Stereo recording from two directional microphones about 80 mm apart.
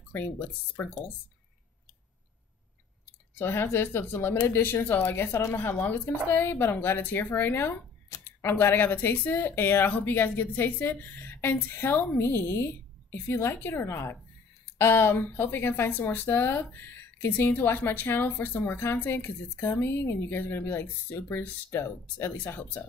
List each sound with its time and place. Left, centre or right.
0.1 s speech: left
3.3 s speech: left